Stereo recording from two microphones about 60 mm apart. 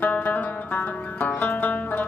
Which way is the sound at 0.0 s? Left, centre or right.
Left.